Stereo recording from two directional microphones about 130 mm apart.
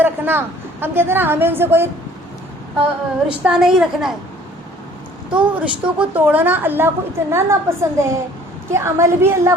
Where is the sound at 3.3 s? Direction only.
5° right (ahead or behind).